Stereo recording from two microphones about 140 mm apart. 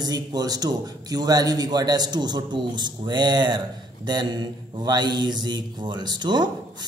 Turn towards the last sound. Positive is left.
turn(degrees=-30)  # may be behind; listen again after turning